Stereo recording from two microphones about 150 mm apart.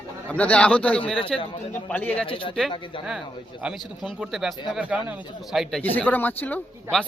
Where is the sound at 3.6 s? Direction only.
5° right (ahead or behind).